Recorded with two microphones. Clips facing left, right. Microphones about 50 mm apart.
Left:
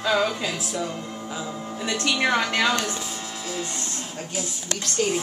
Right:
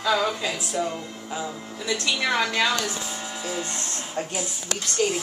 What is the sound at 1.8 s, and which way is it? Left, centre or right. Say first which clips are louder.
Speech: even; left.